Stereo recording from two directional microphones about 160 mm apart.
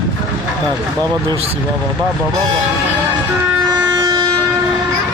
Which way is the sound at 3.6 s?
25° right (ahead or behind).